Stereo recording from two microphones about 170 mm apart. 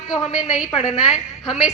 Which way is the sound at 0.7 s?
35° left (ahead or behind).